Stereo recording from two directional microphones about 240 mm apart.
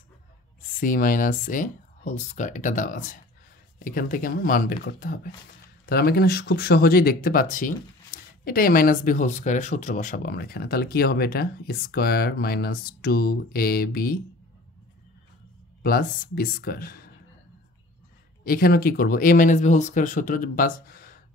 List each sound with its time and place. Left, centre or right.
0.7 s speech: left
15.8 s speech: left
18.5 s speech: left